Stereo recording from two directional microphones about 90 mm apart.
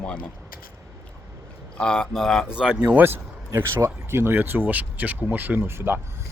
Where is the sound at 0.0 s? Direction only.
10° left (ahead or behind).